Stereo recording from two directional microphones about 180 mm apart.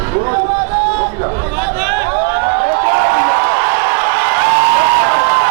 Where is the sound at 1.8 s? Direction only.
15° right (ahead or behind).